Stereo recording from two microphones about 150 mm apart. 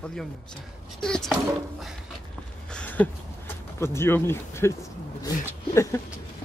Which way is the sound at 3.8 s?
15° left (ahead or behind).